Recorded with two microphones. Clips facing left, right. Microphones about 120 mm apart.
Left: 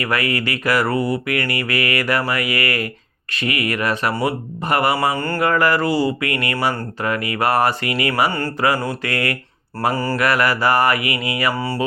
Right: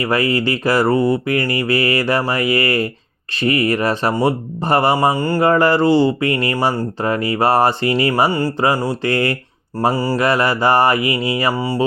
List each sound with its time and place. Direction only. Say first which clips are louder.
0.0 s mantra: right 4 dB; 30° right (ahead or behind)
3.4 s speech: right 5 dB; 30° right (ahead or behind)
5.1 s mantra: right 4 dB; 15° right (ahead or behind)
5.4 s speech: right 4 dB; 30° right (ahead or behind)
9.0 s mantra: right 7 dB; 30° right (ahead or behind)
9.9 s mantra: right 3 dB; 10° right (ahead or behind)
10.2 s mantra: right 2 dB; 25° right (ahead or behind)